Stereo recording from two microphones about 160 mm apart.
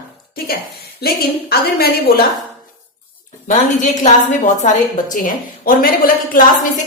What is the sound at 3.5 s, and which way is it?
A woman's voice, 50° left (ahead or behind).